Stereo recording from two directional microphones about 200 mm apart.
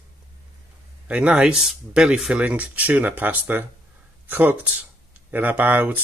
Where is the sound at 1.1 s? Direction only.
5° right (ahead or behind).